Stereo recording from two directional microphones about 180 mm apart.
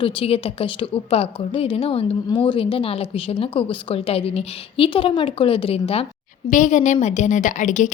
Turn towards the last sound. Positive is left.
turn(degrees=45)  # may be behind; listen again after turning